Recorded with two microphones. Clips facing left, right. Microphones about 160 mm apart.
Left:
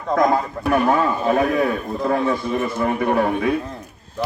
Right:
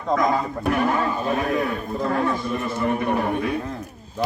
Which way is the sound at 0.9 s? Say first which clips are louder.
Left 4 dB; 60° left (ahead or behind).